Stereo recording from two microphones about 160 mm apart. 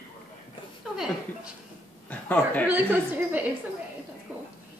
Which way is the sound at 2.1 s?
10° left (ahead or behind).